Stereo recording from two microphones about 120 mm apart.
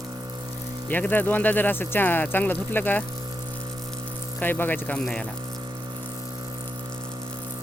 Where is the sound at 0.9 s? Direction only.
15° left (ahead or behind).